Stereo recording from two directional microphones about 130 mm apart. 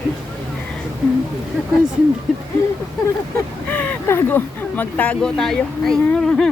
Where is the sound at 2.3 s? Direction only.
Centre (ahead or behind).